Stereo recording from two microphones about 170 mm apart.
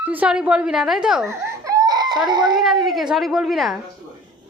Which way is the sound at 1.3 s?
15° right (ahead or behind).